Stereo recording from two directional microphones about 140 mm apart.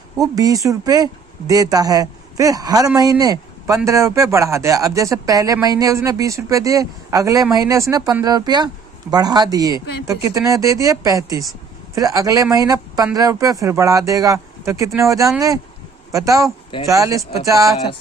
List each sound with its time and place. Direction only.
0.2 s speech: 25° right (ahead or behind)